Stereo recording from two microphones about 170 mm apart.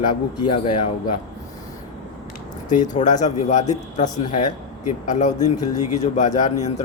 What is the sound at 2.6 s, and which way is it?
Speech, 45° left (ahead or behind).